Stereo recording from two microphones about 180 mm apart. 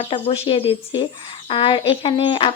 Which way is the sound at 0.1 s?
30° left (ahead or behind).